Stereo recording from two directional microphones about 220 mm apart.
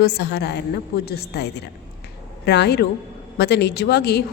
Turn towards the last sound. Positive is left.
turn(degrees=50)  # may be behind; listen again after turning